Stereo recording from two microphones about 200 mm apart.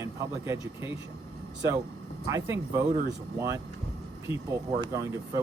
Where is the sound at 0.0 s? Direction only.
15° right (ahead or behind).